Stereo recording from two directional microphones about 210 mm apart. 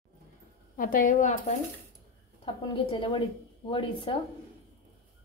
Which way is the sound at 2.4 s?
25° left (ahead or behind).